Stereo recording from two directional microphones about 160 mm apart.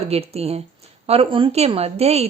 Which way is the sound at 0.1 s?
40° right (ahead or behind).